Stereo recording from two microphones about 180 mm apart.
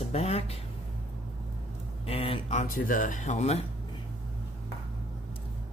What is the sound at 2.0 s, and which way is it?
Speech, 30° left (ahead or behind).